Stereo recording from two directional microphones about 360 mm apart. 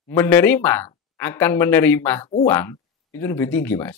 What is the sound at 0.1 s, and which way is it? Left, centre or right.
Speech, centre.